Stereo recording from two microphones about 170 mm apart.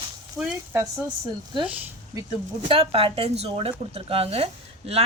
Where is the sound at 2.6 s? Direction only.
35° right (ahead or behind).